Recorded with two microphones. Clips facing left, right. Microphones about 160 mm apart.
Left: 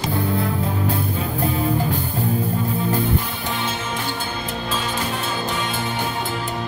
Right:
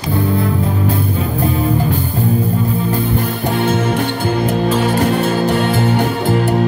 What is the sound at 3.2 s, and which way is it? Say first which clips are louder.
Music: right 10 dB; 55° right (ahead or behind).